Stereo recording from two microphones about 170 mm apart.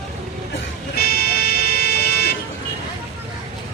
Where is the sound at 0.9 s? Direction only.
65° left (ahead or behind).